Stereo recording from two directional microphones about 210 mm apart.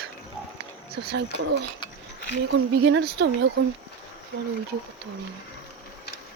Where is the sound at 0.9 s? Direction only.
50° right (ahead or behind).